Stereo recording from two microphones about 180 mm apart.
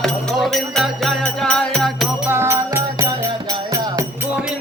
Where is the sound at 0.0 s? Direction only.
Centre (ahead or behind).